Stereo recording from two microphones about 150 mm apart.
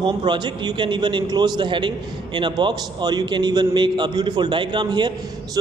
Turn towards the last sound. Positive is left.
turn(degrees=-30)  # may be behind; listen again after turning